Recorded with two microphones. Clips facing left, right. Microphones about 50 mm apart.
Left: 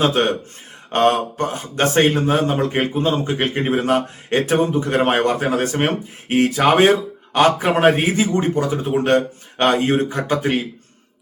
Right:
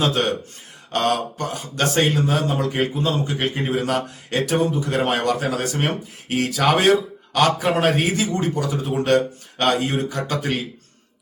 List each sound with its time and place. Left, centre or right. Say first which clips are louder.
0.0 s a man's voice: left 3 dB; left